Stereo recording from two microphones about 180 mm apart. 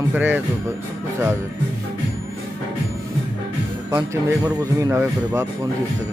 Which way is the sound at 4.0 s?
15° right (ahead or behind).